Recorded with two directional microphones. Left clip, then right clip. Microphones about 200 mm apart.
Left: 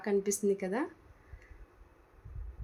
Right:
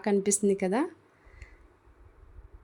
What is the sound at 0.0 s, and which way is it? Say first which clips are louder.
Speech: right 4 dB; 50° right (ahead or behind).